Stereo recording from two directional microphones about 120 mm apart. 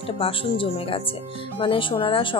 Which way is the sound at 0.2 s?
50° left (ahead or behind).